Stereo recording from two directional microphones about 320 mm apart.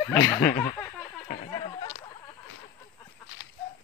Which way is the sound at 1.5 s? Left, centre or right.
Centre.